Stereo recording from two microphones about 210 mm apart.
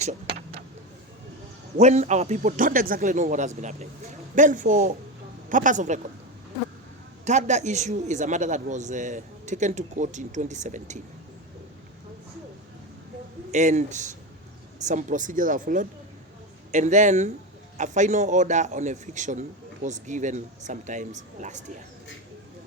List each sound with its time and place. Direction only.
0.0 s vehicle: 30° right (ahead or behind)
1.8 s a man's voice: 35° right (ahead or behind)
7.3 s a man's voice: 35° right (ahead or behind)
13.5 s a man's voice: 35° right (ahead or behind)